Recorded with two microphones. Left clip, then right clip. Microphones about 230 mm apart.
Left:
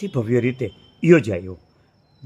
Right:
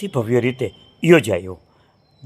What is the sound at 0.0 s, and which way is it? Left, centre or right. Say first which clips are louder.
A man's voice: right 2 dB; centre.